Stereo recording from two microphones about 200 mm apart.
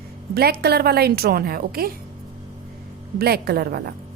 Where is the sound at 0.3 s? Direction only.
50° right (ahead or behind).